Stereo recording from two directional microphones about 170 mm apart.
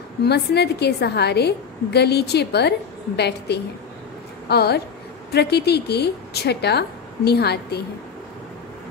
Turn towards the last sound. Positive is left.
turn(degrees=70)  # may be behind; listen again after turning